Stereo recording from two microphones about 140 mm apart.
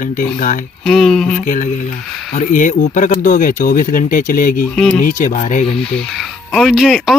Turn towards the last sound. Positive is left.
turn(degrees=0)  # may be behind; listen again after turning